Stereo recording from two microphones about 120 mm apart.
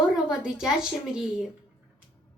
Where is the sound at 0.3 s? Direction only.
5° right (ahead or behind).